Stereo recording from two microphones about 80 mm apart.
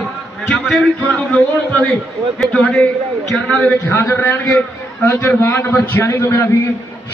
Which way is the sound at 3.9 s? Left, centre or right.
Left.